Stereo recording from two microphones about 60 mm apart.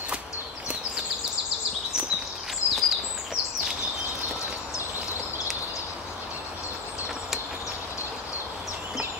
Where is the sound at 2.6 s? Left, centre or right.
Left.